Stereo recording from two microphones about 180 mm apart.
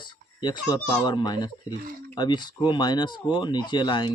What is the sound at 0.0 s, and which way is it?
Speech, 25° left (ahead or behind).